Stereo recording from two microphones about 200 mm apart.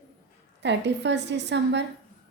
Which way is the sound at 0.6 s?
60° right (ahead or behind).